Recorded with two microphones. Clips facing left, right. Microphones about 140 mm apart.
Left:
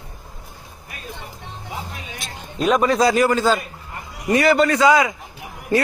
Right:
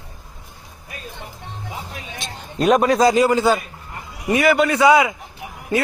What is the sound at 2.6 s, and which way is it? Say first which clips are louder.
Speech: right 2 dB; 60° right (ahead or behind).